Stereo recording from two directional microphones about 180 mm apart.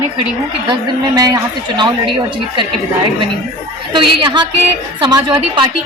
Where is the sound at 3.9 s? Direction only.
25° right (ahead or behind).